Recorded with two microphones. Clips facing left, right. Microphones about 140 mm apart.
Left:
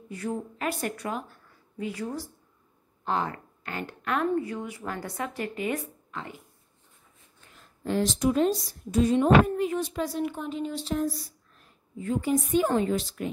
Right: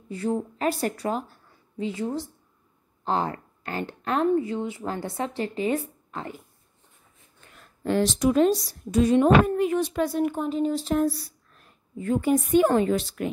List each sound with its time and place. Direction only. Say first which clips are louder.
0.1 s a woman's voice: right 5 dB; 30° right (ahead or behind)
7.5 s a woman's voice: right 4 dB; 70° right (ahead or behind); by 11.0 s 40° right (ahead or behind)
11.0 s a woman's voice: right 5 dB; 65° right (ahead or behind)